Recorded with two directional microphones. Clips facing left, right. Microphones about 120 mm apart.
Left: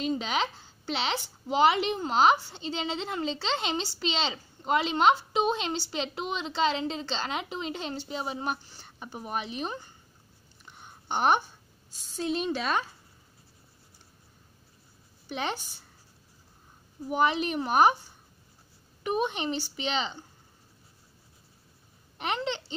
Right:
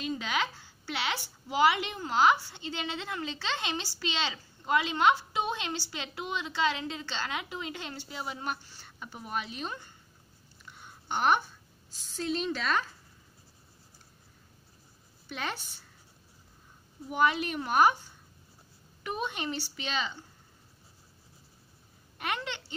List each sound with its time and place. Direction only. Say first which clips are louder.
0.0 s a sound: left 3 dB; 25° left (ahead or behind)
1.5 s speech: left 3 dB; 25° left (ahead or behind)
11.1 s a woman's voice: left 2 dB; 20° left (ahead or behind)
15.2 s a woman's voice: left 4 dB; 20° left (ahead or behind)
17.1 s speech: left 2 dB; 20° left (ahead or behind)
19.0 s speech: left 5 dB; 20° left (ahead or behind)
22.2 s speech: left 4 dB; 25° left (ahead or behind)